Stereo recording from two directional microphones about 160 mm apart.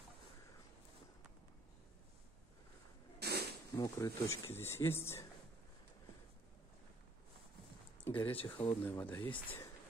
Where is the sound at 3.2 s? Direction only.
90° right.